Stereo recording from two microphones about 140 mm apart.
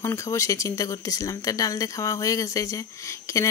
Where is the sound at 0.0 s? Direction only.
20° left (ahead or behind).